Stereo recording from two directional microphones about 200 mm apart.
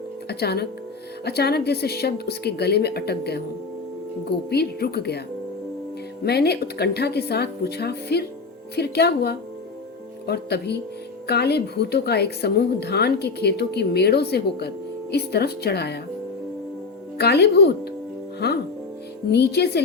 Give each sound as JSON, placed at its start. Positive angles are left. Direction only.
{"t": 0.3, "sound": "a woman's voice", "side_deg": 55}
{"t": 6.2, "sound": "a woman's voice", "side_deg": 55}
{"t": 17.2, "sound": "a woman's voice", "side_deg": 55}